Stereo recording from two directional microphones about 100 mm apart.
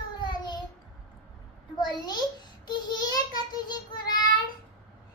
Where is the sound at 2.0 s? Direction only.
45° left (ahead or behind).